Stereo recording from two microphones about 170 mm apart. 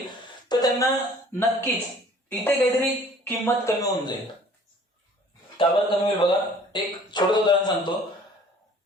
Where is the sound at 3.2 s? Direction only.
15° left (ahead or behind).